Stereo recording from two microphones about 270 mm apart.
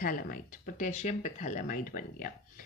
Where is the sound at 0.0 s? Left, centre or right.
Left.